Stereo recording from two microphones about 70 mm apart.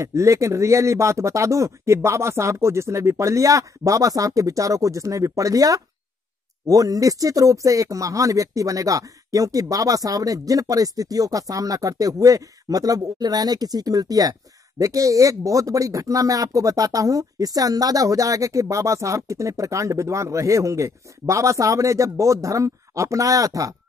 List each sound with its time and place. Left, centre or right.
0.0 s speech: right